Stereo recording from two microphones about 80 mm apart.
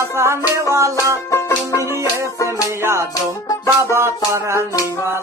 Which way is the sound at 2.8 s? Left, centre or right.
Right.